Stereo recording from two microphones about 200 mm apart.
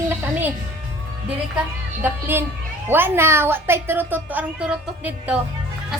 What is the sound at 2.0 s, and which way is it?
A woman's voice, 10° right (ahead or behind).